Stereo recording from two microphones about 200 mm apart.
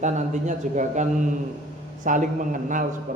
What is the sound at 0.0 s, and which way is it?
A man's voice, 40° right (ahead or behind).